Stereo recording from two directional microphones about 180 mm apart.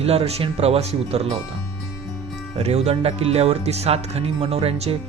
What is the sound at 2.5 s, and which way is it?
Speech, 35° right (ahead or behind).